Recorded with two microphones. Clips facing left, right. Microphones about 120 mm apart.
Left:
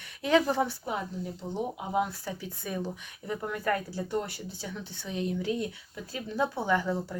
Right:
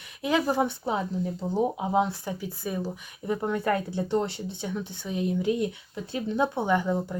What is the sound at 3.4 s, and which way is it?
Speech, 30° right (ahead or behind).